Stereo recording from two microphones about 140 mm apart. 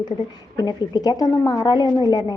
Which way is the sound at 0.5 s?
30° left (ahead or behind).